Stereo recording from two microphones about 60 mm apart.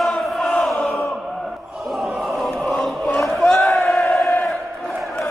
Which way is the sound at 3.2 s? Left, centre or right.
Centre.